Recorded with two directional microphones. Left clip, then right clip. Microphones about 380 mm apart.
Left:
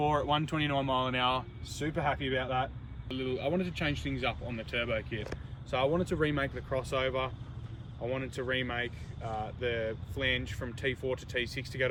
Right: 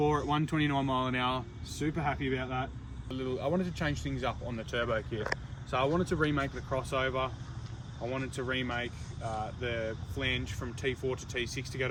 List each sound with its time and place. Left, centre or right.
0.0 s speech: centre
3.6 s speech: right
4.2 s speech: centre